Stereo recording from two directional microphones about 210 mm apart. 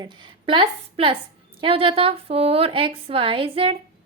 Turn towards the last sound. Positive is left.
turn(degrees=-25)  # may be behind; listen again after turning